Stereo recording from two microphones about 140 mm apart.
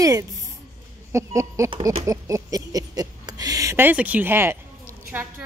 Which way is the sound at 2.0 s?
25° right (ahead or behind).